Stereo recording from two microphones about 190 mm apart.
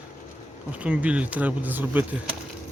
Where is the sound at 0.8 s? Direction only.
5° right (ahead or behind).